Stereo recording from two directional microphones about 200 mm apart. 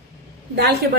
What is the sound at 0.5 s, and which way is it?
Speech, 50° right (ahead or behind).